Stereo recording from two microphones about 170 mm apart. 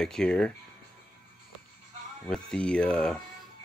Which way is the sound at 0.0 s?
5° left (ahead or behind).